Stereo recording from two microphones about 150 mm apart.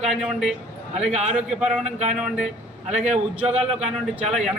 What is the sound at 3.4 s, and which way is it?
Speech, 10° right (ahead or behind).